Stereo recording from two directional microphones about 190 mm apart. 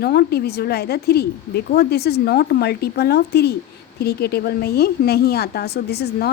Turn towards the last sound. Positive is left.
turn(degrees=55)  # may be behind; listen again after turning